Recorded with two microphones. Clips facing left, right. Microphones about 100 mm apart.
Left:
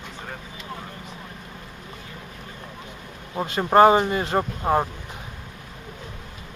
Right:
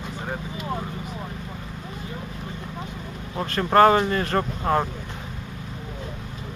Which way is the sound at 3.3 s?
15° left (ahead or behind).